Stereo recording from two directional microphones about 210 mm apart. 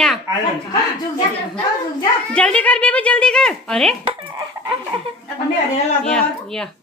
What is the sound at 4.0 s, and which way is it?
Chicken, 25° right (ahead or behind).